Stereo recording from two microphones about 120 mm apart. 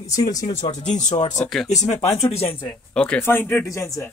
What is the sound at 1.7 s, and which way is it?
Speech, 70° left (ahead or behind).